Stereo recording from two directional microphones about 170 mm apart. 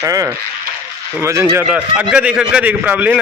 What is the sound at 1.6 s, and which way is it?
A man's voice, 5° right (ahead or behind).